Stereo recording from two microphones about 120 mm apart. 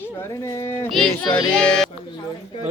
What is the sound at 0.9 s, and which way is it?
Speech, 5° left (ahead or behind).